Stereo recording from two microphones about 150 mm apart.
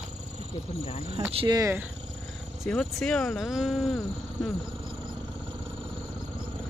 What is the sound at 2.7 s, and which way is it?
Speech, 5° left (ahead or behind).